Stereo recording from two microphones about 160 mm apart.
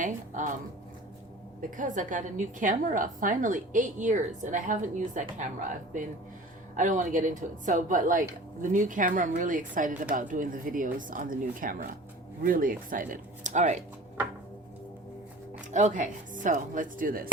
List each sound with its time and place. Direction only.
0.0 s a woman's voice: 55° right (ahead or behind)
1.7 s a woman's voice: 55° right (ahead or behind)
15.7 s a woman's voice: 50° right (ahead or behind)